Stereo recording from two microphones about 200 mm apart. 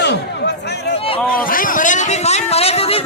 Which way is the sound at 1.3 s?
45° left (ahead or behind).